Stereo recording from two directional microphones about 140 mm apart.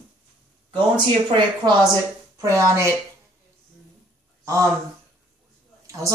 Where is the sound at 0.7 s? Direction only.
35° right (ahead or behind).